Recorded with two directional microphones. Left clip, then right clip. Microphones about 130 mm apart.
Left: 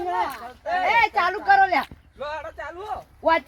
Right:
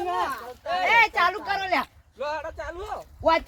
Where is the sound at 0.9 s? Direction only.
5° right (ahead or behind).